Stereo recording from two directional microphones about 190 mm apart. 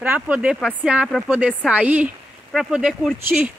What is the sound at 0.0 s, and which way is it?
Speech, 10° right (ahead or behind).